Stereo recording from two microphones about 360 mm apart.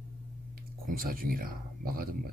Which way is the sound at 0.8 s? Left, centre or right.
Right.